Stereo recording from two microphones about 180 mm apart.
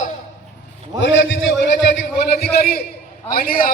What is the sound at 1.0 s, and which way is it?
A man's voice, 90° left.